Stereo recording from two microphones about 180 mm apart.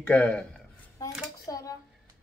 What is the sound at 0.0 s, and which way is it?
Speech, 5° left (ahead or behind).